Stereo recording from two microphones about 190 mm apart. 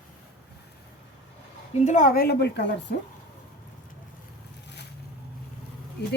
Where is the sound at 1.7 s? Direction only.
40° left (ahead or behind); by 2.6 s 60° left (ahead or behind).